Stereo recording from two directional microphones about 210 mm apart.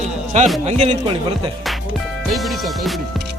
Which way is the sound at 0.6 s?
30° right (ahead or behind).